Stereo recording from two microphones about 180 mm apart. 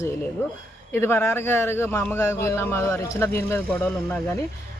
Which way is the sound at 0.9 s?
10° left (ahead or behind).